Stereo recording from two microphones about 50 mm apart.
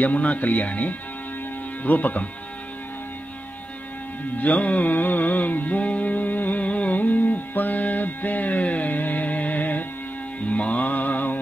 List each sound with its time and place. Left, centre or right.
0.0 s speech: left
4.4 s music: left